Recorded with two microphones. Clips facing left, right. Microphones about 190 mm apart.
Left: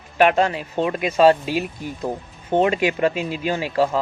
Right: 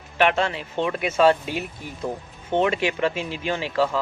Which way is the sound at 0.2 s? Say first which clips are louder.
Left 4 dB; 40° left (ahead or behind).